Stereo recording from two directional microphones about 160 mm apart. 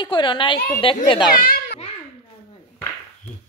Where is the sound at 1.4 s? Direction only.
65° left (ahead or behind).